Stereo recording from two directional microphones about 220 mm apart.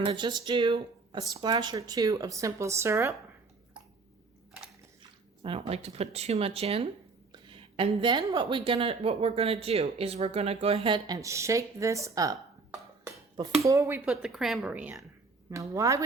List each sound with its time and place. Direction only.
0.0 s speech: 20° right (ahead or behind)
5.4 s speech: 25° right (ahead or behind)